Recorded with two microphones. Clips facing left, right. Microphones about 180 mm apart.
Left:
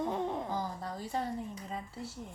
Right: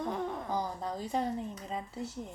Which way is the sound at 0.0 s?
15° left (ahead or behind).